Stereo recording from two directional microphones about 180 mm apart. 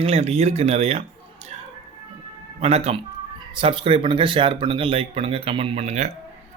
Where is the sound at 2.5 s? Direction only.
35° right (ahead or behind).